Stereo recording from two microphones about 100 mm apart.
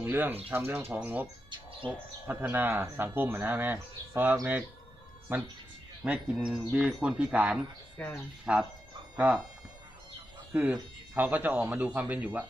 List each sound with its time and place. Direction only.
0.0 s speech: 20° right (ahead or behind)
6.0 s speech: centre (ahead or behind)
8.0 s speech: 15° left (ahead or behind)
8.5 s speech: 10° right (ahead or behind)
10.5 s speech: 15° right (ahead or behind)